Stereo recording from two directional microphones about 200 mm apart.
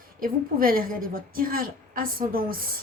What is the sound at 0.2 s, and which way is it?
A woman's voice, 45° right (ahead or behind).